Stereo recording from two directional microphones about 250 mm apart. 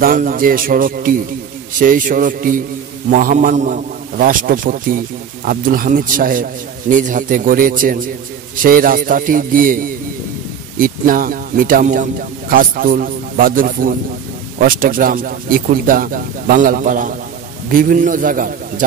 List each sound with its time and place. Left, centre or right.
0.0 s a man's voice: right